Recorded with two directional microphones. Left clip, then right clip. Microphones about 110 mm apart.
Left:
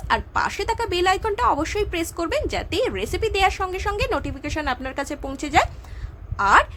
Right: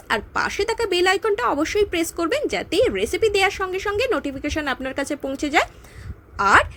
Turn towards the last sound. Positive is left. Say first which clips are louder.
# right 1 dB
turn(degrees=-25)  # may be behind; listen again after turning